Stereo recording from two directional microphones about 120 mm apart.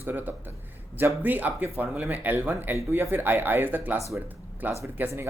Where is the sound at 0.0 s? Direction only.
15° right (ahead or behind).